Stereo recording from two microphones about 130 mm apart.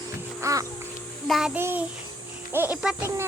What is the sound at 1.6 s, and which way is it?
Speech, 20° right (ahead or behind).